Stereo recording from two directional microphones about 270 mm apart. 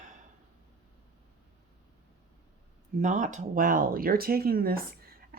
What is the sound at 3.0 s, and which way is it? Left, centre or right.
Speech, right.